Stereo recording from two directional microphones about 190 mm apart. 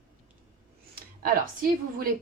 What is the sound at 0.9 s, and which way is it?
Speech, 50° right (ahead or behind).